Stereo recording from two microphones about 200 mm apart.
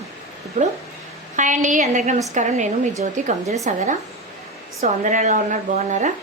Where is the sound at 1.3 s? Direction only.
40° right (ahead or behind).